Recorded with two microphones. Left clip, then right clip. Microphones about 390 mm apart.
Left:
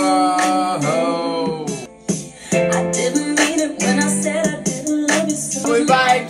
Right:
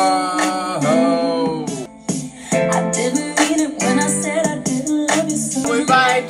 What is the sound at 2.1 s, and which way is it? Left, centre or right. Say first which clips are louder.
Music: even; centre.